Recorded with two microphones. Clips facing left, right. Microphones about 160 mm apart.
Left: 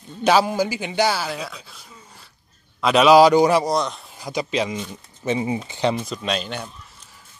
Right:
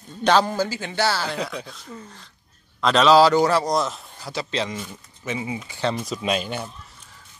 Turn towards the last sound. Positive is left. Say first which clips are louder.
# right 1 dB
turn(degrees=-10)  # may be behind; listen again after turning